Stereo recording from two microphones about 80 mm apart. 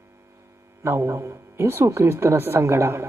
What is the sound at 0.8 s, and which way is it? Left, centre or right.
Speech, right.